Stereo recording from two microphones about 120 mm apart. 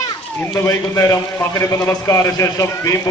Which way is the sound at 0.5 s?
25° left (ahead or behind).